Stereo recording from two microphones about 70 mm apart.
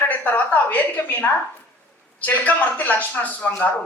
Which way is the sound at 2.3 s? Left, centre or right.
Left.